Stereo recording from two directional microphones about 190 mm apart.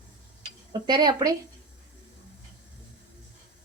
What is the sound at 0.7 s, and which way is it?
Speech, 25° right (ahead or behind).